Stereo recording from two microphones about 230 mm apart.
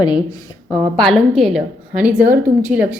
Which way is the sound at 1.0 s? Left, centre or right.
Centre.